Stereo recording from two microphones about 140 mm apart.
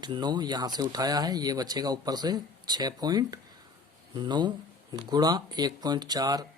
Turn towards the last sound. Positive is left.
turn(degrees=-30)  # may be behind; listen again after turning